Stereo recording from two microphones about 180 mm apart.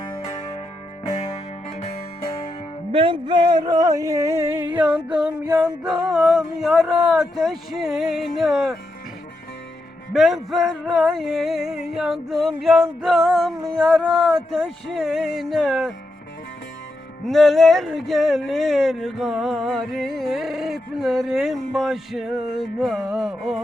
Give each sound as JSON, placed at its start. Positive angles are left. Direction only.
{"t": 1.8, "sound": "music", "side_deg": 50}
{"t": 2.9, "sound": "a sound", "side_deg": -30}
{"t": 5.6, "sound": "speech", "side_deg": -5}
{"t": 10.1, "sound": "speech", "side_deg": 0}
{"t": 17.2, "sound": "speech", "side_deg": 0}